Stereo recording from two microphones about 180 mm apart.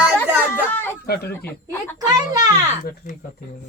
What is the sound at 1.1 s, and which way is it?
Speech, 60° left (ahead or behind).